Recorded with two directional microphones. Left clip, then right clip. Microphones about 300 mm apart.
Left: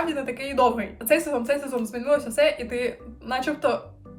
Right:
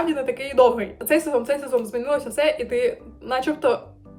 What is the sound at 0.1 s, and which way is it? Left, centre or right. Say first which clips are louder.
Speech: right 4 dB; centre.